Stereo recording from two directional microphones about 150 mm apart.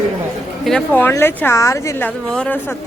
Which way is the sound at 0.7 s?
10° left (ahead or behind).